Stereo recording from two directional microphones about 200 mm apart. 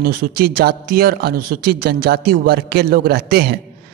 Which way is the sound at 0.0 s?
50° right (ahead or behind).